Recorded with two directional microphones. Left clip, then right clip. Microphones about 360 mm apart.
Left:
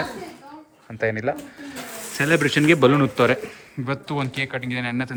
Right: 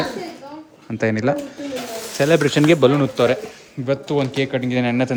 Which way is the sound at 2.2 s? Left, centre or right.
Centre.